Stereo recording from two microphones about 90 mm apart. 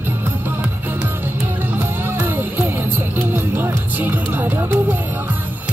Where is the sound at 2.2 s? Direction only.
20° right (ahead or behind).